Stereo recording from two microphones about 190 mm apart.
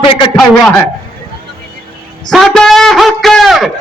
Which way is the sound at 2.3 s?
Centre (ahead or behind).